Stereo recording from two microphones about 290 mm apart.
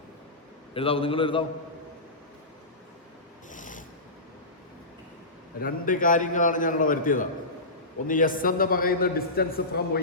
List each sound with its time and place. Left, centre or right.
0.7 s a man's voice: centre
3.5 s a sound: left
5.5 s a man's voice: left